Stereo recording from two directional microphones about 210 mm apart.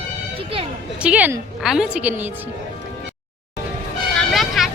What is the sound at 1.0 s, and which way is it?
A woman's voice, 5° right (ahead or behind).